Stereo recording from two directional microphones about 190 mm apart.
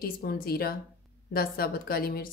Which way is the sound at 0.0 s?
55° left (ahead or behind).